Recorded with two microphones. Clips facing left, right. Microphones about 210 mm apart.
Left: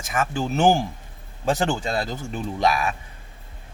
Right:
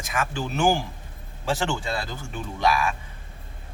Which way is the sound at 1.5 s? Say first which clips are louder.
Left 4 dB; 35° left (ahead or behind).